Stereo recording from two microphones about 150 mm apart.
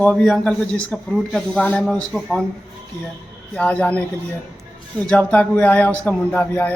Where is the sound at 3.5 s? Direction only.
5° left (ahead or behind).